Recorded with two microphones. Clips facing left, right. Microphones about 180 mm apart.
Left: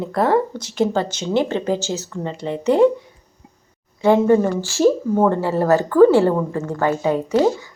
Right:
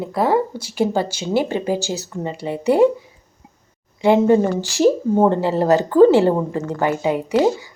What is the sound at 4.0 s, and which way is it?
Speech, 15° right (ahead or behind).